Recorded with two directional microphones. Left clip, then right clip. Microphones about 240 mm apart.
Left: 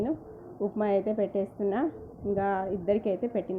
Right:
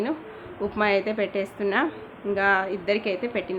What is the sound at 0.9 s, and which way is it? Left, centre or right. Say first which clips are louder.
A woman's voice: right 3 dB; centre.